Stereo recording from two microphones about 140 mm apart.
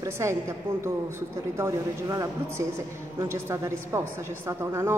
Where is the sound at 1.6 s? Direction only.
20° right (ahead or behind).